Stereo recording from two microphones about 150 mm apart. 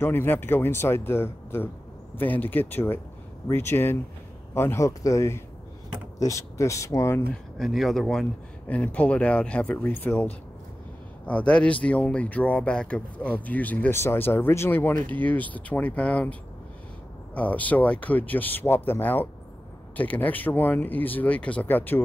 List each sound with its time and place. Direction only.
0.0 s speech: 15° left (ahead or behind)
7.5 s speech: centre (ahead or behind)
11.2 s speech: 10° left (ahead or behind)